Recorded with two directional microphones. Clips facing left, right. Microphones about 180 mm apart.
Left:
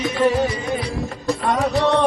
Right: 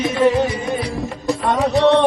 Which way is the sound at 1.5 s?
20° right (ahead or behind).